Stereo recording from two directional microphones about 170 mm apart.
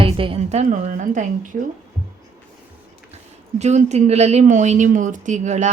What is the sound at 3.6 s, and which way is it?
A woman's voice, 40° right (ahead or behind).